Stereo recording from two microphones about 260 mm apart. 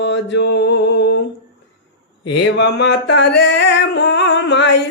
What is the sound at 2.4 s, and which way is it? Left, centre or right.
Singing, left.